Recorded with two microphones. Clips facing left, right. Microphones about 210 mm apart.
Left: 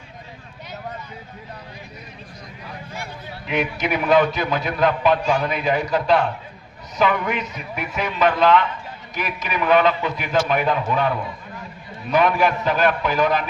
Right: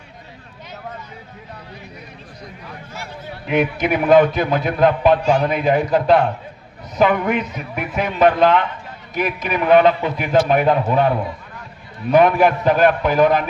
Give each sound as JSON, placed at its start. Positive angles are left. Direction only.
{"t": 3.4, "sound": "a man's voice", "side_deg": -50}
{"t": 5.2, "sound": "a man's voice", "side_deg": -30}
{"t": 5.5, "sound": "a man's voice", "side_deg": -50}
{"t": 12.1, "sound": "a man's voice", "side_deg": -55}